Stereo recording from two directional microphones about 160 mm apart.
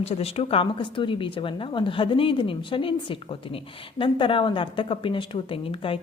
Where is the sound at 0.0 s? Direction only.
40° left (ahead or behind).